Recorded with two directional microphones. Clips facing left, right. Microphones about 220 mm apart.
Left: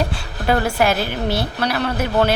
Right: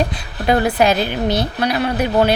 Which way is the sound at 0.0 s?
20° right (ahead or behind).